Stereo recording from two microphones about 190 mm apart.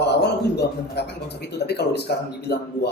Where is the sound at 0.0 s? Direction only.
60° left (ahead or behind).